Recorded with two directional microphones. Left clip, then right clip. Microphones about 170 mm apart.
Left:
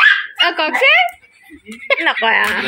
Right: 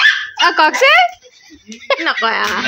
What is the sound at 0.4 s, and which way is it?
Speech, 25° right (ahead or behind).